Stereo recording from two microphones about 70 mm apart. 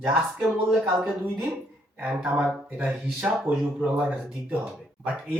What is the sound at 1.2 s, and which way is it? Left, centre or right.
Speech, right.